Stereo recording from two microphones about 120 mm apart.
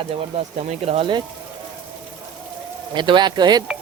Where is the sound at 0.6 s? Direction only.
70° right (ahead or behind).